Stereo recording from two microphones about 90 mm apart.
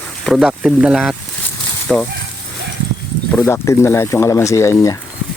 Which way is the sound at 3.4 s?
30° left (ahead or behind).